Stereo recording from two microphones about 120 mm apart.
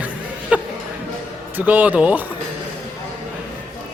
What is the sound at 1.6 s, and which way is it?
Speech, 10° right (ahead or behind).